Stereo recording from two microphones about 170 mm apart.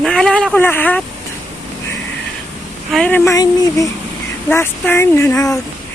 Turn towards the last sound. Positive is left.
turn(degrees=20)  # may be behind; listen again after turning